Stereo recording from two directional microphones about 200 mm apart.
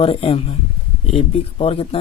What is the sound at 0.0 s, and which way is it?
Speech, 30° left (ahead or behind).